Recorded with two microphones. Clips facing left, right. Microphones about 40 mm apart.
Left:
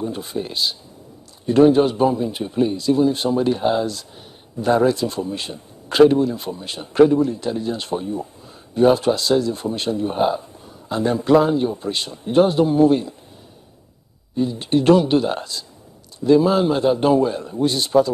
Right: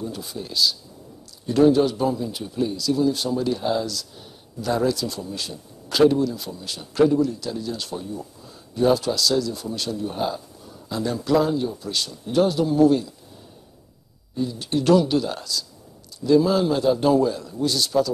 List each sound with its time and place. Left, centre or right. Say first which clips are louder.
0.0 s a man's voice: left 6 dB; left
14.3 s a man's voice: left 5 dB; left